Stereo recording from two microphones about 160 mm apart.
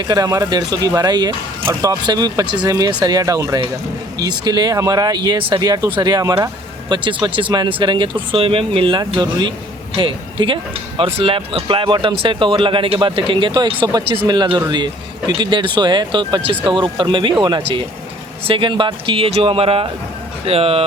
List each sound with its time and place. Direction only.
0.0 s speech: 25° right (ahead or behind)